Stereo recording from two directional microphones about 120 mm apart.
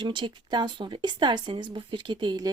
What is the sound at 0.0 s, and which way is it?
Speech, 45° right (ahead or behind).